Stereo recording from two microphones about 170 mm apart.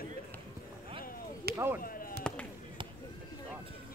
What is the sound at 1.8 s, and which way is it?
Chop, 55° left (ahead or behind).